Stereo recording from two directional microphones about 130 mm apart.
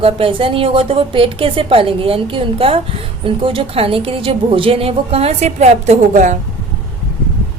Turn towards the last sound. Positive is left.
turn(degrees=-70)  # may be behind; listen again after turning